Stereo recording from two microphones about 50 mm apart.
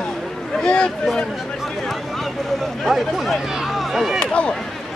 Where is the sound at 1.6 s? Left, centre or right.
Centre.